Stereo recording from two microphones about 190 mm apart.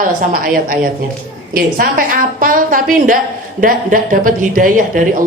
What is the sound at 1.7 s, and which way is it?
A woman's voice, 50° right (ahead or behind).